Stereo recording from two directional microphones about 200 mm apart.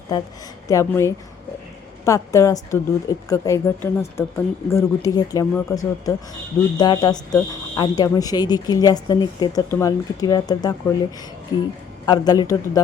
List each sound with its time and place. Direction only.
0.7 s a woman's voice: 15° left (ahead or behind)
12.0 s a woman's voice: 20° left (ahead or behind)